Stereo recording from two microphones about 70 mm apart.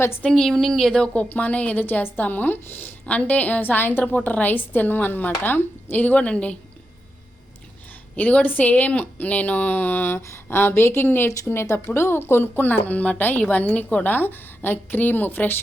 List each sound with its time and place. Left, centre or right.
0.2 s speech: centre
8.1 s speech: left